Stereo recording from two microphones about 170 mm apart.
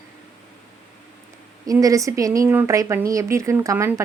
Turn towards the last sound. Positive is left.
turn(degrees=-15)  # may be behind; listen again after turning